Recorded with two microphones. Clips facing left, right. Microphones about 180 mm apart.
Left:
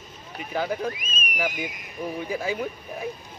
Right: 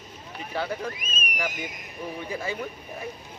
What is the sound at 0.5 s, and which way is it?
Speech, 5° left (ahead or behind).